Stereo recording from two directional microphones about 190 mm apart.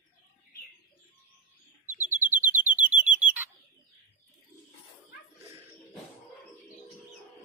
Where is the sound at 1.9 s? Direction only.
10° right (ahead or behind).